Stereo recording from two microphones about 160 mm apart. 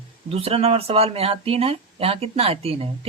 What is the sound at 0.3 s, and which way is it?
A woman's voice, 40° right (ahead or behind).